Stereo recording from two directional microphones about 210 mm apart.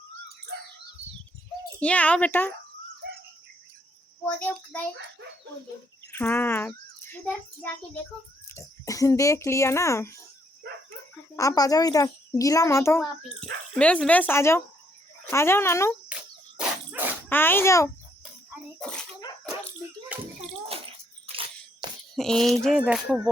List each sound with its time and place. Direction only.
1.8 s a child's voice: 5° left (ahead or behind)
4.4 s a child's voice: 10° left (ahead or behind)
6.1 s a child's voice: 10° left (ahead or behind)
11.3 s a child's voice: 15° left (ahead or behind)
16.6 s dog: 10° right (ahead or behind)
17.2 s a child's voice: 10° left (ahead or behind)
18.8 s a sound: 5° left (ahead or behind)
20.4 s bathtub: 30° right (ahead or behind)
22.1 s a sound: centre (ahead or behind)
22.9 s speech: 5° right (ahead or behind)